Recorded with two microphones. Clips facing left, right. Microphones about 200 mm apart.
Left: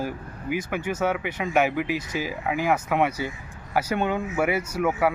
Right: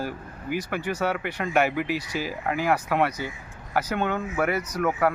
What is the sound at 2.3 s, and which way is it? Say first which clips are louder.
Speech: even; 15° left (ahead or behind).